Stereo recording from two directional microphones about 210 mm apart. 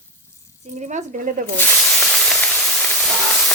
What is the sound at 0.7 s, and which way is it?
Speech, 35° right (ahead or behind).